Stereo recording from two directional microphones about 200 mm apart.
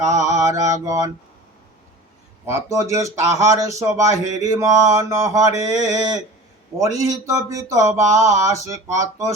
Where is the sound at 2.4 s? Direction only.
15° right (ahead or behind).